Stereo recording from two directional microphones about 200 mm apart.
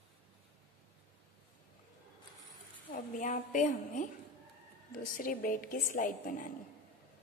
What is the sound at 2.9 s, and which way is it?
A woman's voice, 40° left (ahead or behind).